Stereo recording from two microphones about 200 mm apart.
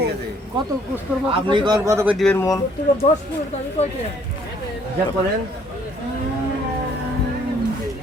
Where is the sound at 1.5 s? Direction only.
20° right (ahead or behind).